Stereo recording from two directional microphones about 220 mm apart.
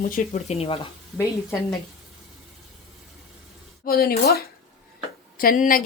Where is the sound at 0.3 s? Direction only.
30° left (ahead or behind).